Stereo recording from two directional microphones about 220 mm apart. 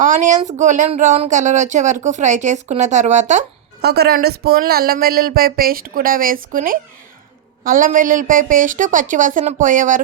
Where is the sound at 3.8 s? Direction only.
45° right (ahead or behind).